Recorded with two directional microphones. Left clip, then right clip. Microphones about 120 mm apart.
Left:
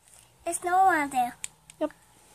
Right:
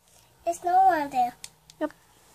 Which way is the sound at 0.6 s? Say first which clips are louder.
Right 1 dB; 10° left (ahead or behind).